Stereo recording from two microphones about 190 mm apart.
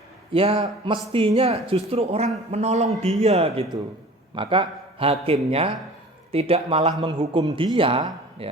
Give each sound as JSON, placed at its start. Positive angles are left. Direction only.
{"t": 0.3, "sound": "speech", "side_deg": -25}